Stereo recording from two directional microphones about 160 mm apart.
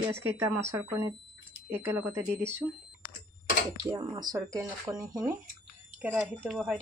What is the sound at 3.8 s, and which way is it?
Speech, 25° right (ahead or behind).